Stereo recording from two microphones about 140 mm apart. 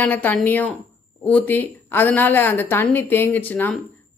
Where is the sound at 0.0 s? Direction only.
10° left (ahead or behind).